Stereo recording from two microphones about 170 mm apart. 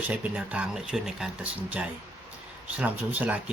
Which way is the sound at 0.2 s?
5° right (ahead or behind).